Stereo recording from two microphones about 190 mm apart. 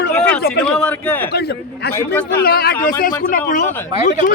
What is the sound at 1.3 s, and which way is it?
Speech, 55° left (ahead or behind).